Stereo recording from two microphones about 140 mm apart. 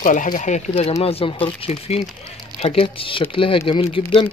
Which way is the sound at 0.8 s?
45° left (ahead or behind).